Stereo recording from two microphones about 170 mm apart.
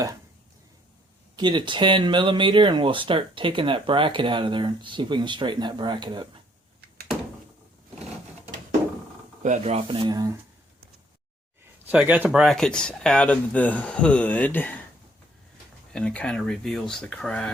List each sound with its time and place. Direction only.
1.4 s speech: 25° right (ahead or behind)
9.4 s speech: 45° right (ahead or behind); by 10.3 s 25° right (ahead or behind)
11.9 s speech: 10° right (ahead or behind); by 14.8 s 10° left (ahead or behind)
15.9 s speech: 5° left (ahead or behind)